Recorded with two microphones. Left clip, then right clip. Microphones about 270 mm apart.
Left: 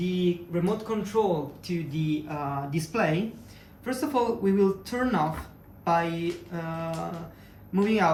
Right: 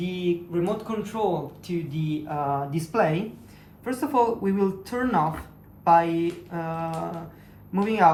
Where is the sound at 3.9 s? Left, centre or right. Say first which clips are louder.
Right 4 dB; centre.